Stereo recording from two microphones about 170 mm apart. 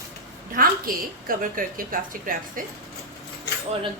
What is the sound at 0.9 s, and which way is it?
A woman's voice, 55° right (ahead or behind).